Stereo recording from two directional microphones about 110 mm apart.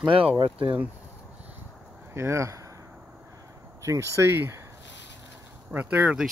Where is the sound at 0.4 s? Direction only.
55° right (ahead or behind).